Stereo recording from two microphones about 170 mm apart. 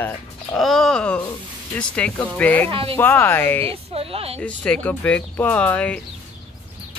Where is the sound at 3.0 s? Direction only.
10° left (ahead or behind).